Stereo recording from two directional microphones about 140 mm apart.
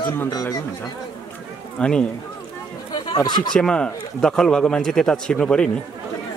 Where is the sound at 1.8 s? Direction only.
5° left (ahead or behind).